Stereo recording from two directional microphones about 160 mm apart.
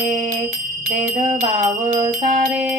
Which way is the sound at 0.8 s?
50° right (ahead or behind).